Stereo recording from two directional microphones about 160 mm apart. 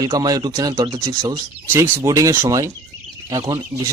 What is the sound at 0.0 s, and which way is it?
Speech, 25° right (ahead or behind).